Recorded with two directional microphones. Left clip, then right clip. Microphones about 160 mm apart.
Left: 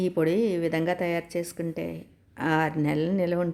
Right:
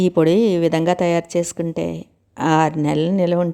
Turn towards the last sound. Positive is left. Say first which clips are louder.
# right 8 dB
turn(degrees=-40)  # may be behind; listen again after turning